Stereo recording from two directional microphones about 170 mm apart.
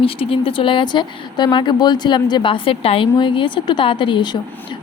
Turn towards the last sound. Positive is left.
turn(degrees=25)  # may be behind; listen again after turning